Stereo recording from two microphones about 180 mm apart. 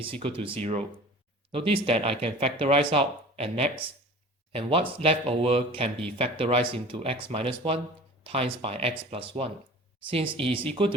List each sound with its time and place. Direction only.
0.0 s speech: 30° right (ahead or behind)
1.5 s speech: 30° right (ahead or behind)